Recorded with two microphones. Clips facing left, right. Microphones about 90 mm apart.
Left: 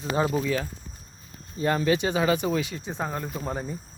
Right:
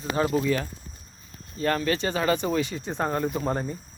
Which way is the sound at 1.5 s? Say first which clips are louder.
Left 2 dB; 15° left (ahead or behind).